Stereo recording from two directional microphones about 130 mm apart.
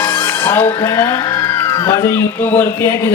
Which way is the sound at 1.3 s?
35° left (ahead or behind).